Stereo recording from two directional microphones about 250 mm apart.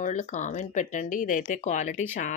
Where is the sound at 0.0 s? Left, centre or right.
Left.